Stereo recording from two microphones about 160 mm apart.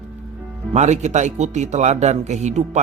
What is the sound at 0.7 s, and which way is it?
Speech, 45° right (ahead or behind).